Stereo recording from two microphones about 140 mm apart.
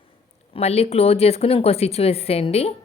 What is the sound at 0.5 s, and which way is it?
A woman's voice, 45° left (ahead or behind).